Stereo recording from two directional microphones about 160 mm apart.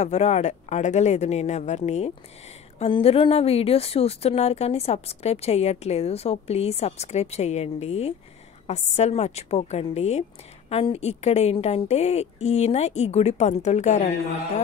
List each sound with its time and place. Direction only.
0.0 s a woman's voice: 45° left (ahead or behind)